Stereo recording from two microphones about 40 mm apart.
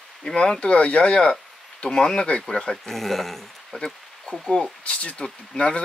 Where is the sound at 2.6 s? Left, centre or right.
Centre.